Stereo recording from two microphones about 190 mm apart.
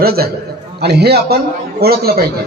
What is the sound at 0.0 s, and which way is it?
A man's voice, 55° right (ahead or behind).